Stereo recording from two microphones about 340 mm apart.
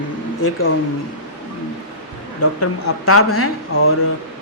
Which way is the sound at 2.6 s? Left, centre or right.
Left.